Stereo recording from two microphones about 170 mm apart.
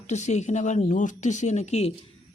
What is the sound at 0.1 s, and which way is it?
Speech, 45° left (ahead or behind).